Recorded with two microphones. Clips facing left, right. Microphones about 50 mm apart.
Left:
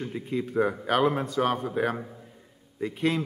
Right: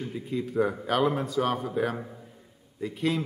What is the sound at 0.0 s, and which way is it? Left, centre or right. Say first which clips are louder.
A man's voice: left 1 dB; centre.